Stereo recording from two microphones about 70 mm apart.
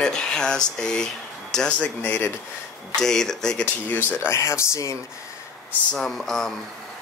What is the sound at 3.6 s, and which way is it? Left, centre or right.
Speech, left.